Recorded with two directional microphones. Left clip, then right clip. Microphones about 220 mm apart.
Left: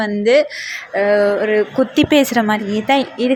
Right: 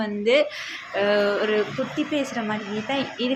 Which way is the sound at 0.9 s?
20° left (ahead or behind).